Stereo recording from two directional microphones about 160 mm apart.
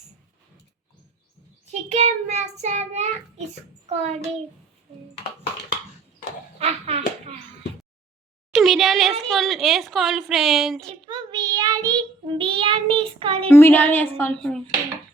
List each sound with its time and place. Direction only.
1.6 s a child's voice: 45° right (ahead or behind)
6.6 s hands: 40° right (ahead or behind)
8.5 s a woman's voice: centre (ahead or behind)
11.0 s child singing: 25° right (ahead or behind)
13.5 s a woman's voice: 15° left (ahead or behind)